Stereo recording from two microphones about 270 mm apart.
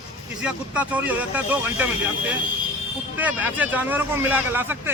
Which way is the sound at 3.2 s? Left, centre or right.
Centre.